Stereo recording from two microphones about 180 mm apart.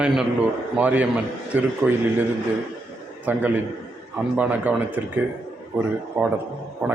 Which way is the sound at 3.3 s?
10° right (ahead or behind).